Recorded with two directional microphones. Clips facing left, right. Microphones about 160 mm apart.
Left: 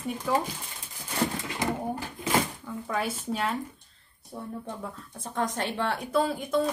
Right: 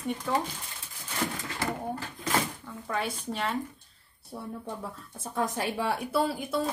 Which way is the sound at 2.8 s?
5° left (ahead or behind).